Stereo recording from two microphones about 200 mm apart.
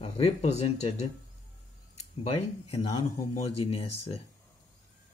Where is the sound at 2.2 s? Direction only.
30° left (ahead or behind).